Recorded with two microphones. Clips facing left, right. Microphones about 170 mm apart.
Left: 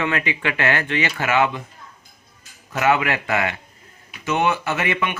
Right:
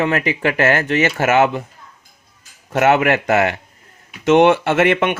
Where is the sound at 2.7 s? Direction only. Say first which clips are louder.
Right 5 dB; 50° right (ahead or behind).